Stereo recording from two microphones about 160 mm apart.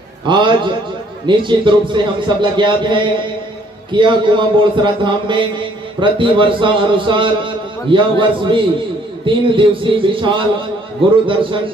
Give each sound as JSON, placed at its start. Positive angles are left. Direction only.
{"t": 0.3, "sound": "a man's voice", "side_deg": -30}